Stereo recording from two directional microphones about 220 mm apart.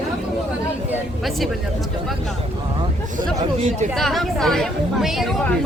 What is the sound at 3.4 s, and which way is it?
Speech, 25° right (ahead or behind).